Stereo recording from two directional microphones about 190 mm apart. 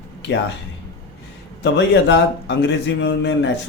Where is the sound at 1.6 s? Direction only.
70° left (ahead or behind).